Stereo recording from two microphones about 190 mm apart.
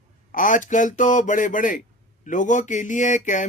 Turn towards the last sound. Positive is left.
turn(degrees=40)  # may be behind; listen again after turning